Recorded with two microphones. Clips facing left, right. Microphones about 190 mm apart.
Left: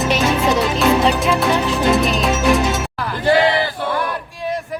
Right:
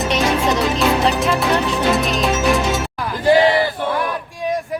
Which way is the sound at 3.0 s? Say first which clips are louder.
Right 2 dB; 15° right (ahead or behind).